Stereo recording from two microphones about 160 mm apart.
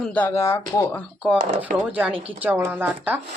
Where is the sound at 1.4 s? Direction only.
60° right (ahead or behind).